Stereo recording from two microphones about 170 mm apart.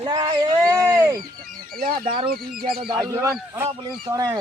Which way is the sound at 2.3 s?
60° right (ahead or behind).